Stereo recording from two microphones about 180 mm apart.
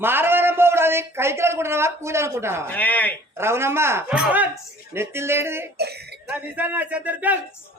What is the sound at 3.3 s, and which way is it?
A man's voice, 15° right (ahead or behind).